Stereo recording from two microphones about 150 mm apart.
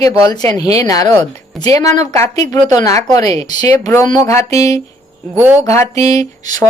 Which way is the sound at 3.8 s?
20° left (ahead or behind).